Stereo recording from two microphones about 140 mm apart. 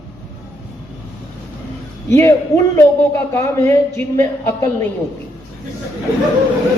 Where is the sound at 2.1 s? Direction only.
20° left (ahead or behind).